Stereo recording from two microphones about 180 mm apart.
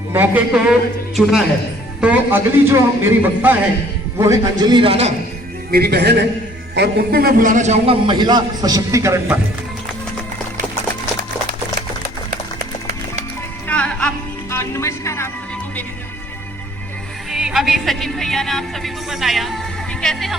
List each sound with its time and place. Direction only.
0.1 s a man's voice: 10° right (ahead or behind); by 5.1 s 35° right (ahead or behind)
5.7 s a man's voice: 60° right (ahead or behind); by 9.4 s 15° right (ahead or behind)
13.7 s music: 5° left (ahead or behind)
17.3 s music: 5° right (ahead or behind)